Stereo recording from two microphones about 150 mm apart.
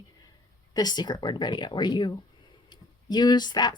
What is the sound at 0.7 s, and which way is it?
A woman's voice, 25° left (ahead or behind).